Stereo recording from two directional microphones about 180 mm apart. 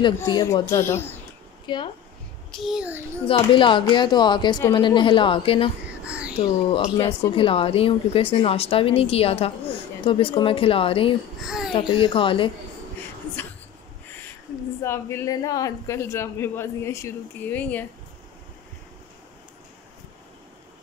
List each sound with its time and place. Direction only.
0.3 s speech: 20° left (ahead or behind)
1.7 s a woman's voice: 25° left (ahead or behind)
2.5 s a child's voice: centre (ahead or behind)
3.3 s a woman's voice: 30° left (ahead or behind)
6.0 s a sound: 5° right (ahead or behind)
6.7 s a woman's voice: 30° left (ahead or behind)
11.4 s a child's voice: centre (ahead or behind)
11.7 s a woman's voice: 30° left (ahead or behind)
14.8 s speech: 15° left (ahead or behind)